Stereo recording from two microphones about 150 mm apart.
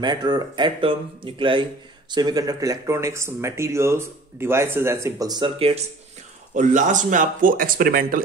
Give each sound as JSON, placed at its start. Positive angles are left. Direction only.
{"t": 0.0, "sound": "speech", "side_deg": -30}
{"t": 6.5, "sound": "speech", "side_deg": -55}